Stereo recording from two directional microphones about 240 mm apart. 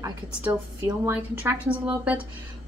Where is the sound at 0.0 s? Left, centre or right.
Centre.